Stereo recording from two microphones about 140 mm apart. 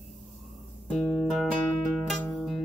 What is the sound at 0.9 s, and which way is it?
Music, 5° left (ahead or behind).